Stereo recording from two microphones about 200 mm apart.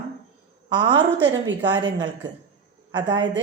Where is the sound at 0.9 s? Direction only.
65° right (ahead or behind).